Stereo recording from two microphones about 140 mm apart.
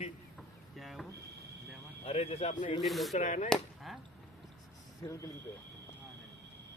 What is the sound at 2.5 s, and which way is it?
Speech, 30° left (ahead or behind).